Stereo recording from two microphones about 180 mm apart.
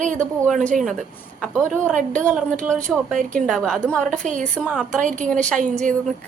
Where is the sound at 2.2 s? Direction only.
5° left (ahead or behind).